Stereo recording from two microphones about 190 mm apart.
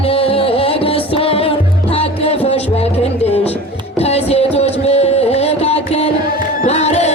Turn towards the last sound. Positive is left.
turn(degrees=35)  # may be behind; listen again after turning